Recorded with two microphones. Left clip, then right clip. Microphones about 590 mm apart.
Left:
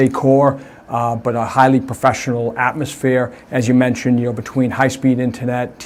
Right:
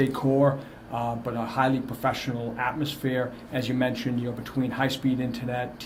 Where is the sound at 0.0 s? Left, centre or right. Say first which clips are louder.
Left 10 dB; left.